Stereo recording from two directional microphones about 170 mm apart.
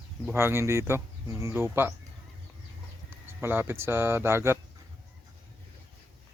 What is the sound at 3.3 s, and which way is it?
Speech, 15° right (ahead or behind).